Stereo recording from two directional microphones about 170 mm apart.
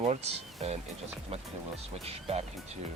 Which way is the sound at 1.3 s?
35° right (ahead or behind).